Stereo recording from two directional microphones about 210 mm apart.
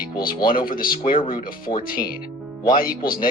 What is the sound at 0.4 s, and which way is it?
Speech, 40° left (ahead or behind).